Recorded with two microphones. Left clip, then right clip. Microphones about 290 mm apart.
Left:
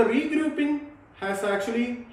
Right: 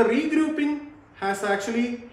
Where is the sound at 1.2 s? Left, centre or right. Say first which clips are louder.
Right 1 dB; centre.